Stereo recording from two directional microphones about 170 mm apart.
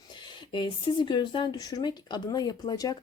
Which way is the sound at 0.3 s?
30° left (ahead or behind).